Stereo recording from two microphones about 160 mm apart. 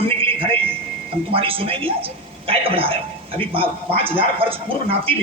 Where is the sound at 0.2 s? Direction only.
35° right (ahead or behind).